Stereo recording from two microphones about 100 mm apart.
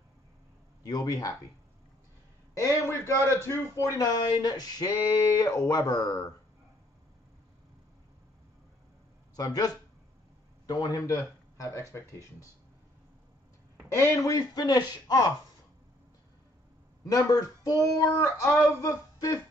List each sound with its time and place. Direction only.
0.8 s speech: 40° left (ahead or behind)
2.5 s a man's voice: 30° left (ahead or behind)
4.0 s speech: 40° left (ahead or behind)
9.3 s speech: 40° left (ahead or behind)
13.9 s speech: 30° left (ahead or behind)
17.0 s speech: 35° left (ahead or behind)